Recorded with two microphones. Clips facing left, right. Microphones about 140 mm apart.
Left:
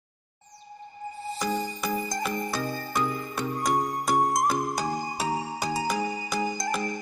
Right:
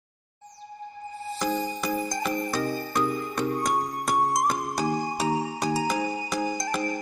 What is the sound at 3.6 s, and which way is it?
Music, centre (ahead or behind).